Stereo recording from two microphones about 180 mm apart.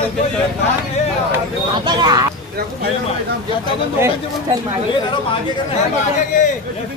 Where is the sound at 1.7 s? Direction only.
25° right (ahead or behind).